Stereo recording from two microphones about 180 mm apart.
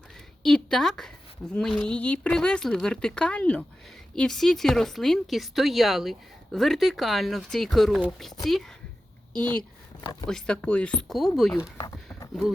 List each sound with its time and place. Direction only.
0.4 s speech: centre (ahead or behind)
10.2 s speech: 5° left (ahead or behind)
11.5 s speech: 15° left (ahead or behind)